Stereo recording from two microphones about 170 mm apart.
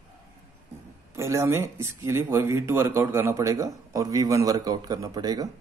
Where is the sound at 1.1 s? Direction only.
15° right (ahead or behind).